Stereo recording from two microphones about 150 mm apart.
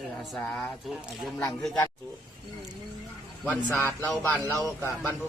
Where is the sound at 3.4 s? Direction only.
15° left (ahead or behind).